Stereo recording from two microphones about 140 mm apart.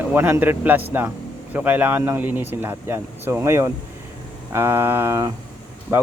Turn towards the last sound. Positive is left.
turn(degrees=-20)  # may be behind; listen again after turning